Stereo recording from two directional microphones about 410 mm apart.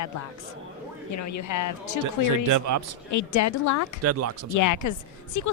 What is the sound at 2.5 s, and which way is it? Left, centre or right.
Speech, right.